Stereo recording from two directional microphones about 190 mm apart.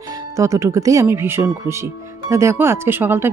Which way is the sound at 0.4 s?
15° right (ahead or behind).